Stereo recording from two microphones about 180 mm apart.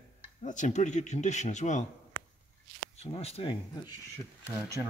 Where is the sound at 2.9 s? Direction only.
35° left (ahead or behind).